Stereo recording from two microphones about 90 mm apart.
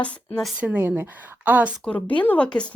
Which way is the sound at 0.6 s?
20° right (ahead or behind).